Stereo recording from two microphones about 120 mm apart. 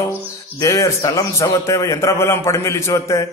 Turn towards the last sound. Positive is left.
turn(degrees=25)  # may be behind; listen again after turning